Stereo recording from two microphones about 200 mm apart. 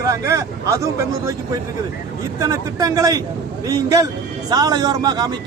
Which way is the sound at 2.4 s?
15° right (ahead or behind).